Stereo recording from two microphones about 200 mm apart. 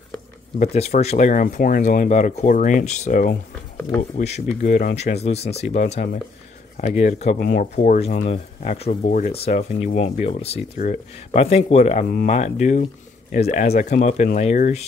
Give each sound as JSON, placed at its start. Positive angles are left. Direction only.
{"t": 0.6, "sound": "speech", "side_deg": 35}
{"t": 4.5, "sound": "speech", "side_deg": 40}
{"t": 7.3, "sound": "speech", "side_deg": 50}
{"t": 7.7, "sound": "speech", "side_deg": 35}